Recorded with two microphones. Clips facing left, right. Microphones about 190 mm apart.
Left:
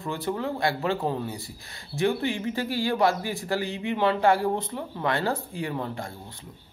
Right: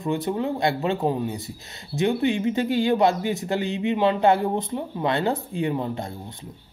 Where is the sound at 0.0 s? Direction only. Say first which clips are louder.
Right 4 dB; 20° right (ahead or behind).